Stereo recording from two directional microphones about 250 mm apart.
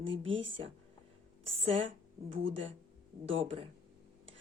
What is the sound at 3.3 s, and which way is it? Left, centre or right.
Speech, right.